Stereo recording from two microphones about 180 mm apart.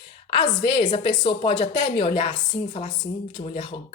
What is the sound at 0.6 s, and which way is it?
Speech, 25° left (ahead or behind).